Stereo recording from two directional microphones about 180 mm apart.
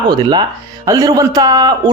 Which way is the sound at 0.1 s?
25° right (ahead or behind).